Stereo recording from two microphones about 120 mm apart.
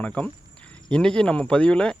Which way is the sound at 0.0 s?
10° left (ahead or behind).